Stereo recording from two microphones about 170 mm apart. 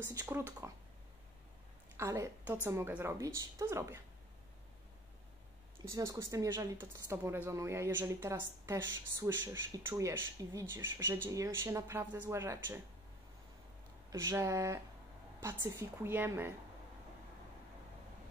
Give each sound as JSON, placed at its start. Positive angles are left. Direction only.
{"t": 0.0, "sound": "a woman's voice", "side_deg": -15}
{"t": 2.0, "sound": "a woman's voice", "side_deg": -15}
{"t": 5.9, "sound": "a woman's voice", "side_deg": -20}
{"t": 14.1, "sound": "a woman's voice", "side_deg": -15}